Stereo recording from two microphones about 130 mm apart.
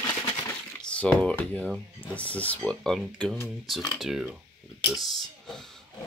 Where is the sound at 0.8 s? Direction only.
10° left (ahead or behind).